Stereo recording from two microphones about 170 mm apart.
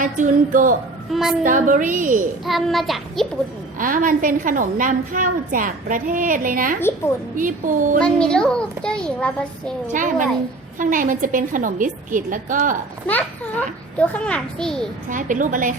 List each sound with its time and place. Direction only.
0.0 s a woman's voice: 50° right (ahead or behind)
1.1 s a child's voice: centre (ahead or behind)
1.5 s a woman's voice: 50° right (ahead or behind)
2.5 s a child's voice: centre (ahead or behind)
3.8 s a woman's voice: 50° right (ahead or behind)
8.0 s a child's voice: 5° left (ahead or behind)
9.9 s a woman's voice: 50° right (ahead or behind)
13.1 s a child's voice: 10° left (ahead or behind)
15.1 s a woman's voice: 50° right (ahead or behind)